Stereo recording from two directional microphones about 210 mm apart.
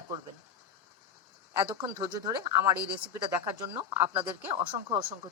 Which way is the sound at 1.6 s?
20° right (ahead or behind).